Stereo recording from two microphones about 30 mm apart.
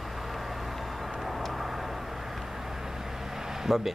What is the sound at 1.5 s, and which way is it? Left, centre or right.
Vehicle, centre.